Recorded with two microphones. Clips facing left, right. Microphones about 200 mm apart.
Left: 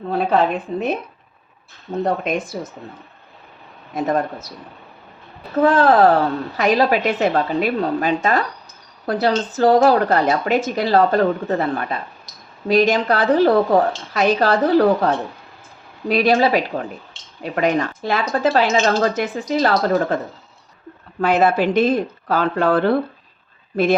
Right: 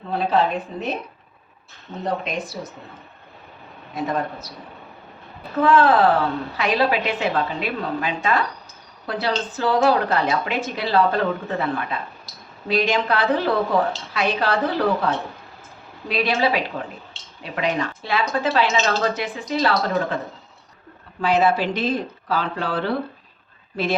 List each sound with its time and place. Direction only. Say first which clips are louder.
0.1 s a woman's voice: left 3 dB; 50° left (ahead or behind)
2.3 s a woman's voice: left 6 dB; 50° left (ahead or behind)
3.9 s a woman's voice: left 4 dB; 45° left (ahead or behind)
5.6 s a woman's voice: left 3 dB; 40° left (ahead or behind)
21.2 s a woman's voice: left 3 dB; 50° left (ahead or behind)